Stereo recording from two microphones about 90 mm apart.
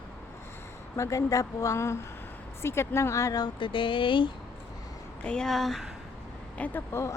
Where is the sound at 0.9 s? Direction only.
35° left (ahead or behind).